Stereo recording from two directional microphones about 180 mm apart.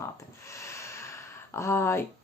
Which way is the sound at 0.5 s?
15° left (ahead or behind).